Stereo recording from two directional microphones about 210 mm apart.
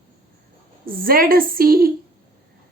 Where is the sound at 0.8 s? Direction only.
45° right (ahead or behind).